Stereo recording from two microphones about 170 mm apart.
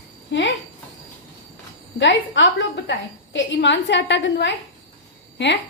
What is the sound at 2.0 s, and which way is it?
A woman's voice, 90° left.